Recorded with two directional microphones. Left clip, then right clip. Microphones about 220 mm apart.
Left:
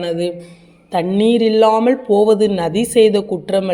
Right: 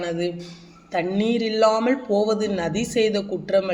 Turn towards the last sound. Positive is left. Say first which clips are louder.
# left 4 dB
turn(degrees=35)  # may be behind; listen again after turning